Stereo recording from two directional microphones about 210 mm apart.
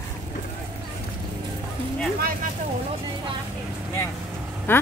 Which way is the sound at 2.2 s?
45° right (ahead or behind).